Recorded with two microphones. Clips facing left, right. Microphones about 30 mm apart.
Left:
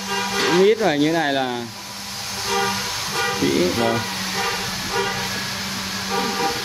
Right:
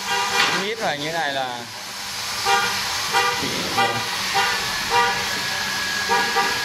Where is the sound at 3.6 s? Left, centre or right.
Right.